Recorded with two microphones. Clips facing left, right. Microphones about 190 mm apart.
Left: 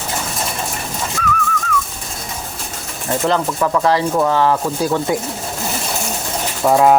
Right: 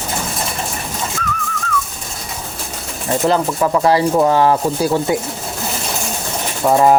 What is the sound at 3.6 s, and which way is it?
Speech, 15° right (ahead or behind).